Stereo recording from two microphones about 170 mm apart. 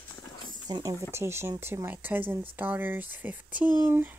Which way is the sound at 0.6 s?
25° right (ahead or behind).